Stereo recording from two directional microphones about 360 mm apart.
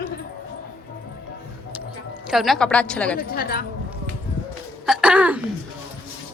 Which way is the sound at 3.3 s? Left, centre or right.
Left.